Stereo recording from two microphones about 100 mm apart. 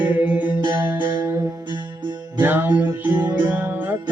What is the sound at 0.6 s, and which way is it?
Music, 45° right (ahead or behind).